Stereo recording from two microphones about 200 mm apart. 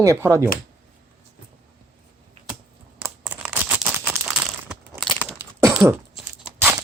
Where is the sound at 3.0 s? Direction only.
10° right (ahead or behind).